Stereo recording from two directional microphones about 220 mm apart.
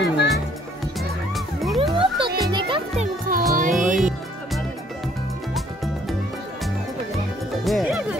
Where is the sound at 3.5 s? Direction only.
35° right (ahead or behind).